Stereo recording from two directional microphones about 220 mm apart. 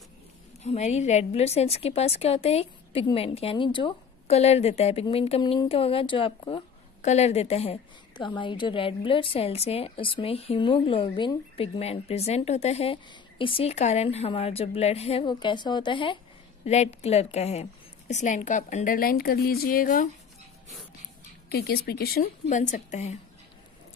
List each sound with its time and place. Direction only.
0.7 s a woman's voice: 30° left (ahead or behind)
21.5 s a woman's voice: 45° left (ahead or behind)